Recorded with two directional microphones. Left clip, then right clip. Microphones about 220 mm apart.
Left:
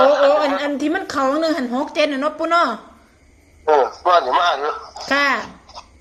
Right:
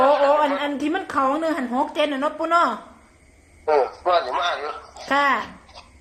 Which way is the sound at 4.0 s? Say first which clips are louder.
Left 6 dB; 15° left (ahead or behind).